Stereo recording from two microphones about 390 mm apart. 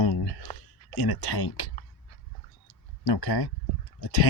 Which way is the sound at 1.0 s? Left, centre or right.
Left.